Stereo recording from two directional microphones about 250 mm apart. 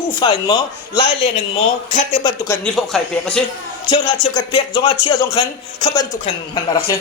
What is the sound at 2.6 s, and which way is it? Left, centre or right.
Speech, centre.